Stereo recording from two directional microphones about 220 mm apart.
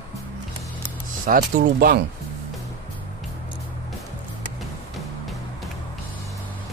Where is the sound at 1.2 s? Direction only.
40° right (ahead or behind).